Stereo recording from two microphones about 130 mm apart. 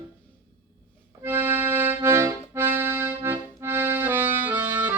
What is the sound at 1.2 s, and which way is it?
Accordion, 20° right (ahead or behind).